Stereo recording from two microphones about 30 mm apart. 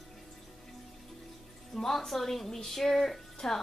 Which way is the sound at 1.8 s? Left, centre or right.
Centre.